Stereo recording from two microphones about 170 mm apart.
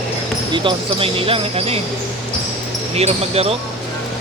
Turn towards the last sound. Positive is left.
turn(degrees=-35)  # may be behind; listen again after turning